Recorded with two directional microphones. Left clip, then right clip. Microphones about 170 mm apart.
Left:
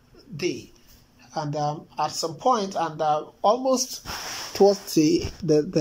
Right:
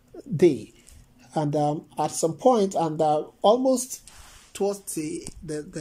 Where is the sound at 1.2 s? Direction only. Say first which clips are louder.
Right 3 dB; 45° right (ahead or behind).